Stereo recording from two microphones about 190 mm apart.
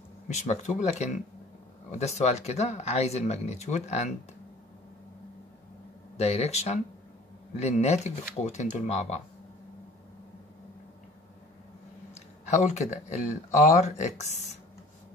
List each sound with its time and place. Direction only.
0.3 s speech: 35° left (ahead or behind)
6.1 s speech: 35° left (ahead or behind)
12.1 s speech: 35° left (ahead or behind)